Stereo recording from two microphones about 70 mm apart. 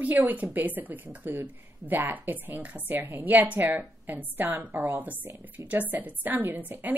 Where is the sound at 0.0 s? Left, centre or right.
Right.